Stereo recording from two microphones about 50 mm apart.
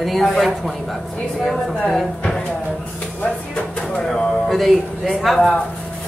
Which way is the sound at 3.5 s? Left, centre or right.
Left.